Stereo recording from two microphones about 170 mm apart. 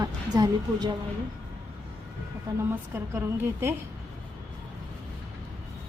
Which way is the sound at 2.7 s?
15° right (ahead or behind).